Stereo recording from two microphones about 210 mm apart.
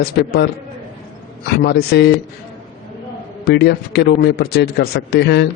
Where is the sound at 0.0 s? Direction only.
45° left (ahead or behind).